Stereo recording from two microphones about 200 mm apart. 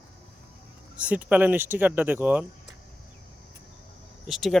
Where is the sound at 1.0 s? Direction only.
5° right (ahead or behind).